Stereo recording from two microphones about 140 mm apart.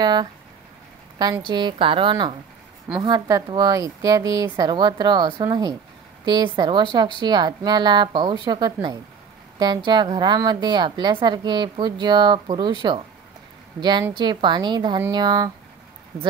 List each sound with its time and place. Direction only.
0.0 s a woman's voice: 30° right (ahead or behind)
1.5 s a woman's voice: 35° right (ahead or behind)
9.8 s a woman's voice: 35° right (ahead or behind)
13.7 s a woman's voice: 30° right (ahead or behind)